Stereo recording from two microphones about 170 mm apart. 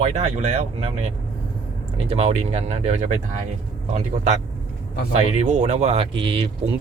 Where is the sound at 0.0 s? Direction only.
40° right (ahead or behind).